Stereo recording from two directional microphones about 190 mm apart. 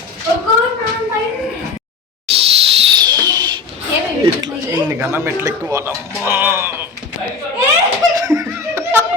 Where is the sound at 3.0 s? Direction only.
20° right (ahead or behind).